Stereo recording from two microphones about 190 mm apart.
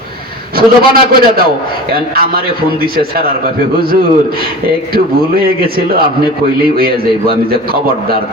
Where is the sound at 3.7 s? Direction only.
50° right (ahead or behind).